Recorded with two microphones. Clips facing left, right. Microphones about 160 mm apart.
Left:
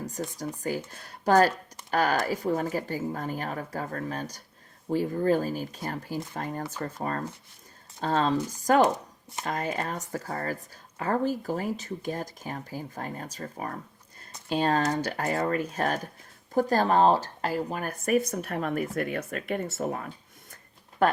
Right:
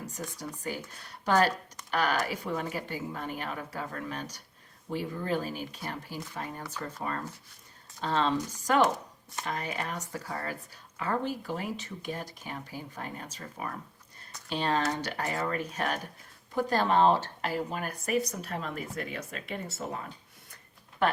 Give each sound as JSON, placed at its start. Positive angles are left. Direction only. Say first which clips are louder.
{"t": 0.3, "sound": "speech", "louder": "left 6 dB", "side_deg": 45}